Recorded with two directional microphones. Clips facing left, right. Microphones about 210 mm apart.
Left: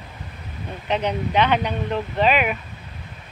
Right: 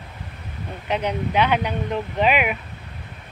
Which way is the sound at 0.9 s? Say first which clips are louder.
Left 1 dB; 10° right (ahead or behind).